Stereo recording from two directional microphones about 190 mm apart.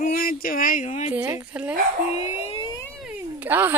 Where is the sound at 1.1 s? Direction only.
10° right (ahead or behind).